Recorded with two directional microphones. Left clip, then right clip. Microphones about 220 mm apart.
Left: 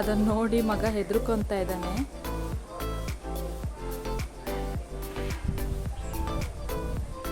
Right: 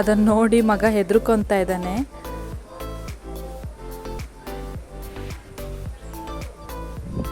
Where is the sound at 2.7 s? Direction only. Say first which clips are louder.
Right 1 dB; centre (ahead or behind).